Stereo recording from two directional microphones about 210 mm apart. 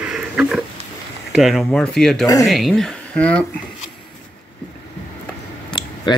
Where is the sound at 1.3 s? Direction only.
Centre (ahead or behind).